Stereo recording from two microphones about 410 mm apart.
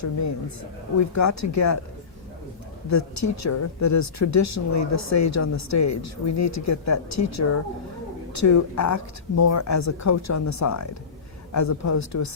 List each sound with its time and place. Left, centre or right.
0.0 s a man's voice: left
2.9 s speech: left